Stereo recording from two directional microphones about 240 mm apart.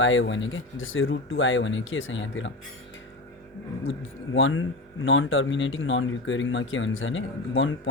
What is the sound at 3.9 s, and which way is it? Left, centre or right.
Speech, left.